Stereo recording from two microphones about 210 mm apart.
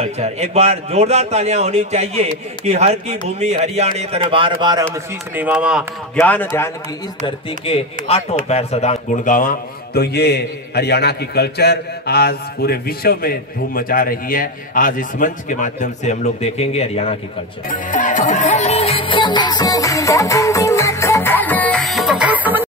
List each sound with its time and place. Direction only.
0.0 s a man's voice: 30° right (ahead or behind)
5.3 s speech: 5° right (ahead or behind)
6.2 s speech: 10° left (ahead or behind)
7.2 s a man's voice: 30° left (ahead or behind)
17.6 s music: 40° left (ahead or behind); by 22.7 s 10° right (ahead or behind)